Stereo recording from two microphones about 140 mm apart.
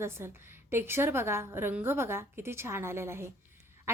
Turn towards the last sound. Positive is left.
turn(degrees=-20)  # may be behind; listen again after turning